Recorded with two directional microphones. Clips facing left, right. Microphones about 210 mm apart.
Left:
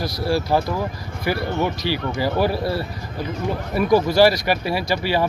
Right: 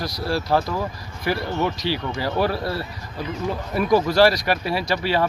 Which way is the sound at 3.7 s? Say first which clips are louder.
Left 2 dB; 5° left (ahead or behind).